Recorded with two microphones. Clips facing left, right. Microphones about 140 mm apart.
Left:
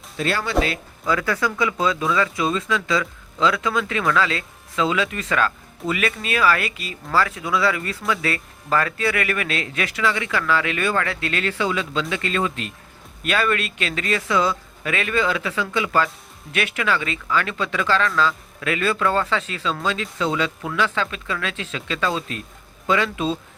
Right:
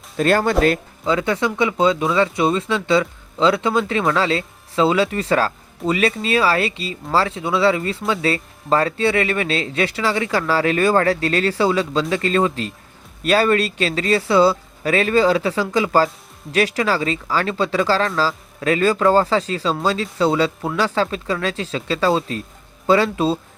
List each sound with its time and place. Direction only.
0.2 s speech: 50° right (ahead or behind)
1.0 s speech: 25° right (ahead or behind)